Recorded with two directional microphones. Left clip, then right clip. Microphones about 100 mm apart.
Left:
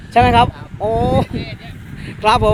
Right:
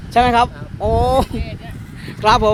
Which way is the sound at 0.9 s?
10° right (ahead or behind).